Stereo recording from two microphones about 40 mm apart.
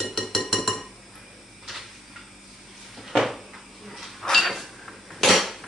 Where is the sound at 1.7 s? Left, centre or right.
Centre.